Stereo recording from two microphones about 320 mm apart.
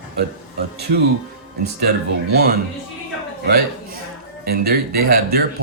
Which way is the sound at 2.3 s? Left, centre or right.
Right.